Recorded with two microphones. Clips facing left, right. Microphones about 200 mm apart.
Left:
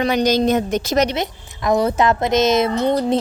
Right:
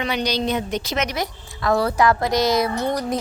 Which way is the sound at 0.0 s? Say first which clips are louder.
Left 7 dB; 45° left (ahead or behind).